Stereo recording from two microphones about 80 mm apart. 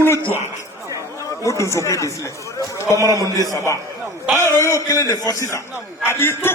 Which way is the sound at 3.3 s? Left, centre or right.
Right.